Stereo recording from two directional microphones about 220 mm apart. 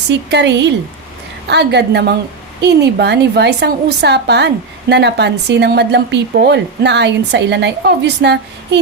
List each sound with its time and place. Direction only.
0.1 s a woman's voice: 50° right (ahead or behind)